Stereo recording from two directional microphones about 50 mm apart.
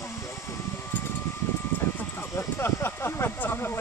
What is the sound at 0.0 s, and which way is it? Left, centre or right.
Mechanical fan, left.